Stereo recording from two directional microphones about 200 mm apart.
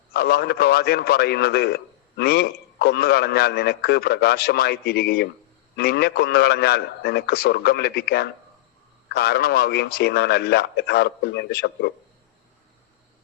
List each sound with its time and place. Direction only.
0.1 s a man's voice: 55° left (ahead or behind)